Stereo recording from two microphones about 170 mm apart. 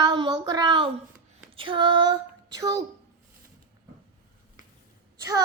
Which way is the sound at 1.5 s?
30° right (ahead or behind).